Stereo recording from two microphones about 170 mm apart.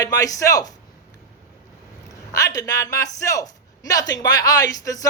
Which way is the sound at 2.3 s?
20° left (ahead or behind).